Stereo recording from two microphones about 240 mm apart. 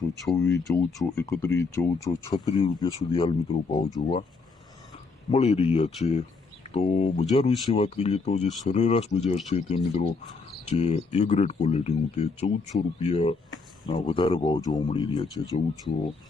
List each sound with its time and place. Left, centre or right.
0.3 s speech: centre
5.3 s speech: left